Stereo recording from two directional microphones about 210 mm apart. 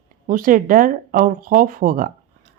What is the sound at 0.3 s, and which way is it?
Speech, 40° right (ahead or behind).